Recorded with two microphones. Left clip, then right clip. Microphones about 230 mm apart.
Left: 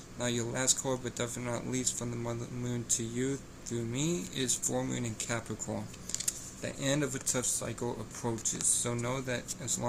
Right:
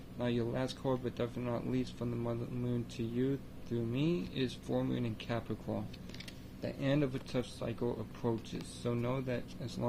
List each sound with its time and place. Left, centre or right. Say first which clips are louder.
0.2 s speech: left 2 dB; centre